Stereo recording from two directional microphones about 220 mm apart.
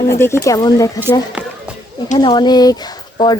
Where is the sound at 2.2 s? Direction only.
20° left (ahead or behind).